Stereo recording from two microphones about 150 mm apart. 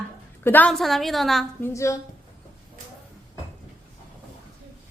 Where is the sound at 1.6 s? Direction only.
20° left (ahead or behind).